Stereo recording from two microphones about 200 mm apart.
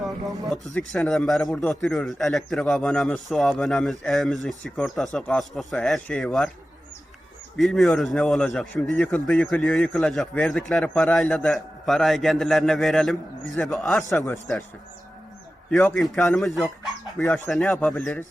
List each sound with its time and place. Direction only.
0.4 s speech: centre (ahead or behind)
7.5 s speech: centre (ahead or behind)
15.7 s speech: 5° left (ahead or behind)